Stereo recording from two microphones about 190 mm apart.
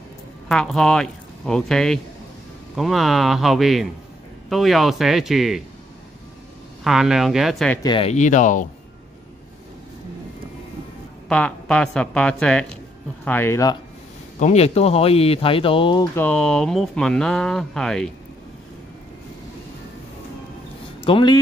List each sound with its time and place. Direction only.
0.5 s speech: centre (ahead or behind)
6.8 s speech: centre (ahead or behind)
7.8 s speech: 30° left (ahead or behind)
11.2 s speech: 5° left (ahead or behind)
14.4 s speech: 35° left (ahead or behind)
16.2 s speech: 5° left (ahead or behind)
21.0 s speech: 25° left (ahead or behind)